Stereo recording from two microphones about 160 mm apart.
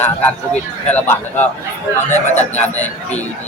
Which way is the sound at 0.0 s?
10° left (ahead or behind).